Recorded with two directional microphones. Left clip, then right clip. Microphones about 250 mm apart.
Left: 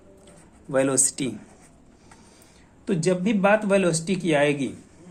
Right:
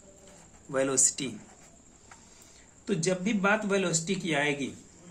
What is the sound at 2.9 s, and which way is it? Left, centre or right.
Speech, left.